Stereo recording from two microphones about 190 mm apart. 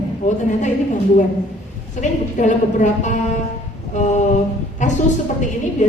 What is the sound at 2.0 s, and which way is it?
A woman's voice, 40° left (ahead or behind).